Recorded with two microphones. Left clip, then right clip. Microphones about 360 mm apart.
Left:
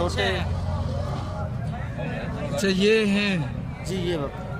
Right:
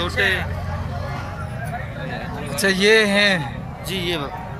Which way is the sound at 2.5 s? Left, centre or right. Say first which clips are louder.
Right 6 dB; centre.